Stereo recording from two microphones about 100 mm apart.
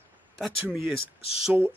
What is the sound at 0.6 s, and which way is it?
Speech, 20° right (ahead or behind).